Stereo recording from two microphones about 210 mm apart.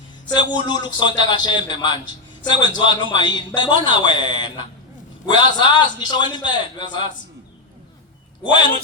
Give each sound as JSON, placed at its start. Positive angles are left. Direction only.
{"t": 0.3, "sound": "a man's voice", "side_deg": 20}